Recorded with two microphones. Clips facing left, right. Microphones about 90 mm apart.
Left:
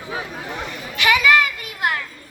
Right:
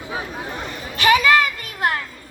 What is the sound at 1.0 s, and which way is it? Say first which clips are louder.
Children playing: right 1 dB; 40° right (ahead or behind).